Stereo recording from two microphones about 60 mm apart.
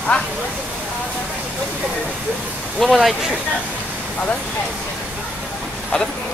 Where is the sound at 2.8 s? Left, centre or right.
Centre.